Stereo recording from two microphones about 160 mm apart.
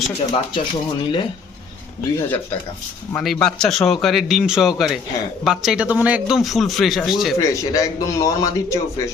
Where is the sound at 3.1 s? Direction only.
5° left (ahead or behind).